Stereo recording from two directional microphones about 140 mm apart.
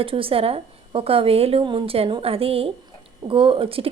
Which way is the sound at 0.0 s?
40° right (ahead or behind).